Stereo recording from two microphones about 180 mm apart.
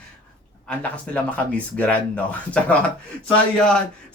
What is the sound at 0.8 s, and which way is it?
Speech, 5° left (ahead or behind).